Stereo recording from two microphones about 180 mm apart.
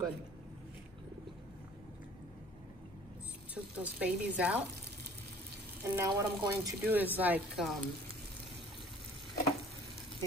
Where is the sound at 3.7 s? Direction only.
5° right (ahead or behind).